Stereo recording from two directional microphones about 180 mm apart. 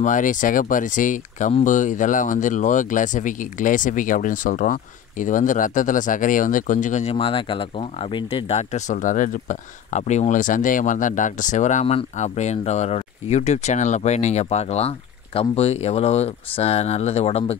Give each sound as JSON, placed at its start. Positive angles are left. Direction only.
{"t": 0.0, "sound": "speech", "side_deg": 45}